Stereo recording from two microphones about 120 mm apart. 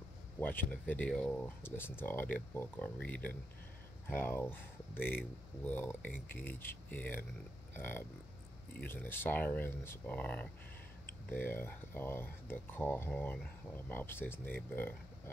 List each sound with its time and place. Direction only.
0.4 s speech: 15° left (ahead or behind)